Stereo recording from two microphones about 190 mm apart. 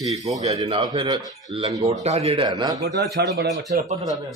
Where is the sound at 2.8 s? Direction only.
60° right (ahead or behind).